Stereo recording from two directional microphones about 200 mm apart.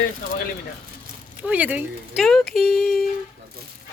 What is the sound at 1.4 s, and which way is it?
Speech, 5° right (ahead or behind).